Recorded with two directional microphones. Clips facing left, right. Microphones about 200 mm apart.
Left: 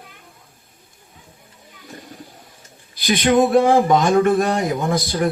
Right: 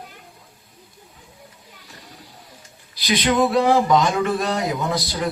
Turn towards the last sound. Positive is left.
turn(degrees=50)  # may be behind; listen again after turning